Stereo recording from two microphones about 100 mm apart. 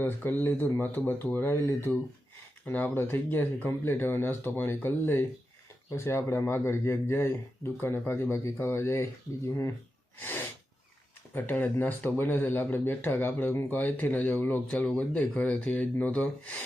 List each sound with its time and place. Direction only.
0.0 s speech: 20° left (ahead or behind)
10.2 s sneeze: 20° left (ahead or behind)
11.3 s speech: 20° left (ahead or behind)